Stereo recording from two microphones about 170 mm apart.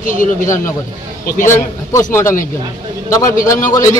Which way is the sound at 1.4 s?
15° left (ahead or behind).